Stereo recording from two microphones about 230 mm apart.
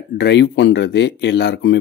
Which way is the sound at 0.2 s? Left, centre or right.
Left.